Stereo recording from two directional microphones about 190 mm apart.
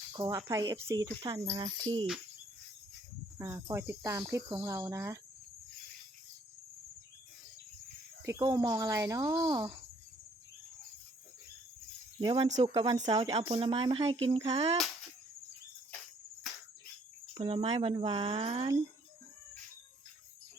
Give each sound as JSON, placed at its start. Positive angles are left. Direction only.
{"t": 0.1, "sound": "speech", "side_deg": -20}
{"t": 3.3, "sound": "cricket", "side_deg": -15}
{"t": 8.2, "sound": "speech", "side_deg": -20}
{"t": 12.2, "sound": "speech", "side_deg": -25}
{"t": 12.5, "sound": "speech", "side_deg": -35}
{"t": 13.1, "sound": "speech", "side_deg": -20}
{"t": 17.3, "sound": "speech", "side_deg": -30}